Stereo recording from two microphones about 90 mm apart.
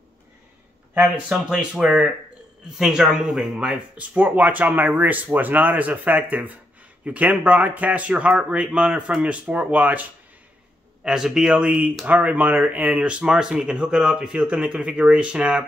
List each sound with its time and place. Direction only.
0.9 s speech: 15° right (ahead or behind)
11.1 s speech: 5° right (ahead or behind)